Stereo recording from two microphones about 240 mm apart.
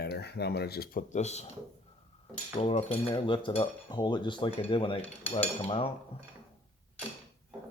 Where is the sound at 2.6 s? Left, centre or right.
Left.